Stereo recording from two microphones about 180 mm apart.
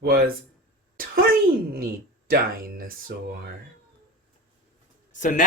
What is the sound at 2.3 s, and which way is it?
Speech, 55° right (ahead or behind).